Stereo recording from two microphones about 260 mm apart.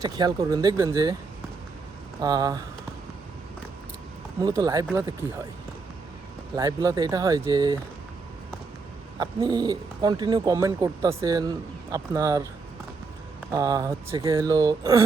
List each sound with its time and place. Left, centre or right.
0.0 s speech: centre
2.2 s speech: centre
4.4 s speech: centre
6.6 s speech: centre
9.1 s speech: centre
13.5 s speech: centre